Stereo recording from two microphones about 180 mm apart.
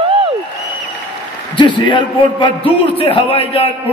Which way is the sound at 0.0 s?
30° right (ahead or behind).